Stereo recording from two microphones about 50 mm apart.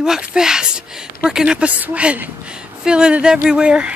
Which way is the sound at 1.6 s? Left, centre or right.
Right.